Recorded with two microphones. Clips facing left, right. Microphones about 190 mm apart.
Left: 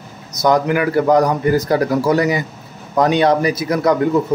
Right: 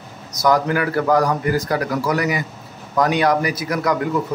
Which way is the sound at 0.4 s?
20° left (ahead or behind).